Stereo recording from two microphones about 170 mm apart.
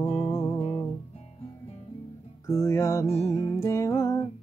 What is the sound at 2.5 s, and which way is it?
Music, 15° left (ahead or behind).